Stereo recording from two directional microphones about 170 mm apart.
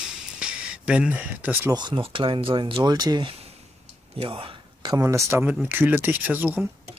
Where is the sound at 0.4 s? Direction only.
5° right (ahead or behind).